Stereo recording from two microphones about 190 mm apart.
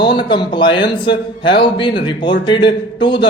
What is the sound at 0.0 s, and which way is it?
A man's voice, 25° left (ahead or behind).